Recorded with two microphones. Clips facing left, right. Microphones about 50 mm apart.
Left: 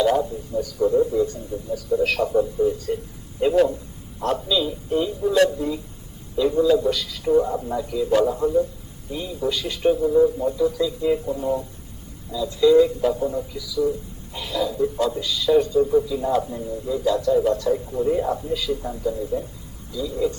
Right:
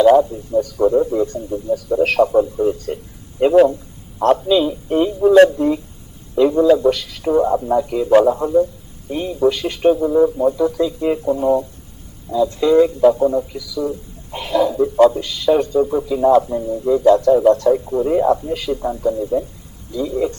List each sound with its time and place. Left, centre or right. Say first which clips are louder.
0.0 s a man's voice: right 9 dB; right
2.2 s a man's voice: right 5 dB; right
2.6 s a man's voice: right 3 dB; right
3.4 s a man's voice: right 7 dB; right
8.2 s a man's voice: right 5 dB; right
9.0 s a man's voice: right 9 dB; right
10.0 s a man's voice: right 4 dB; right
10.5 s a man's voice: right 4 dB; right
14.3 s a man's voice: right 8 dB; right
15.8 s a man's voice: right 1 dB; right
16.0 s a man's voice: right 9 dB; right
16.5 s a man's voice: right 8 dB; right
17.0 s a man's voice: right 7 dB; right